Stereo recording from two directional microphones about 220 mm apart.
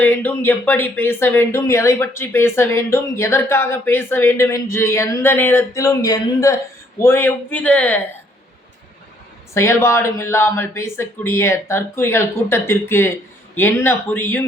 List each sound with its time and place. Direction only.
0.0 s speech: 10° left (ahead or behind)
9.6 s speech: 10° left (ahead or behind)